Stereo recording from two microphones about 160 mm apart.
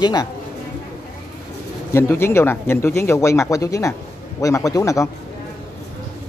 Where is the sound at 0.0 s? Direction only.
25° left (ahead or behind).